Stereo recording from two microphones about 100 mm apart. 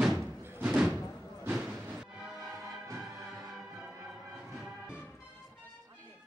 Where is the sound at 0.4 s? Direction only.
20° right (ahead or behind).